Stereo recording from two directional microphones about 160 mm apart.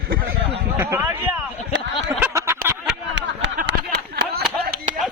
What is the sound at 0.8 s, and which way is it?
Speech, 15° right (ahead or behind).